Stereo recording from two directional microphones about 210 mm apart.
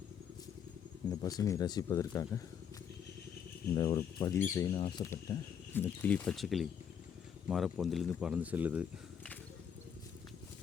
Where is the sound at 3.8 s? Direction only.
15° left (ahead or behind); by 8.9 s 5° right (ahead or behind).